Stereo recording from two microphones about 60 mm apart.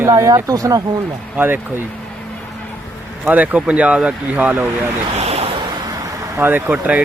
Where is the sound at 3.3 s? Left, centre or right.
Right.